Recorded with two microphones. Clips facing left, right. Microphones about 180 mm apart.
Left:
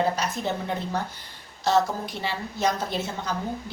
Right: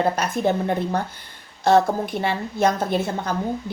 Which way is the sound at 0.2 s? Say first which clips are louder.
Right 7 dB; 55° right (ahead or behind).